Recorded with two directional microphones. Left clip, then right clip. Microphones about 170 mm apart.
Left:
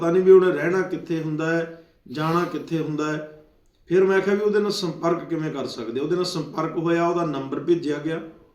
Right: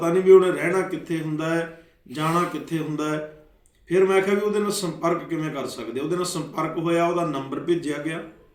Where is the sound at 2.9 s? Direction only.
25° left (ahead or behind).